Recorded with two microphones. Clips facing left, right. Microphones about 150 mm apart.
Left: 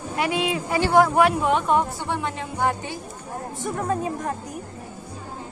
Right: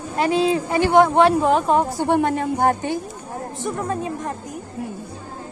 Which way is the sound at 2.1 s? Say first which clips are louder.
Right 9 dB; 50° right (ahead or behind).